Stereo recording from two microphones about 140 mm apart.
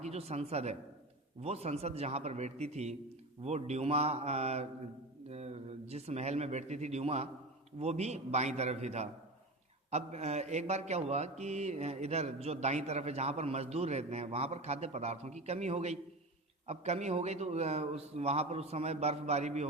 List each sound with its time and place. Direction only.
0.0 s speech: 50° right (ahead or behind)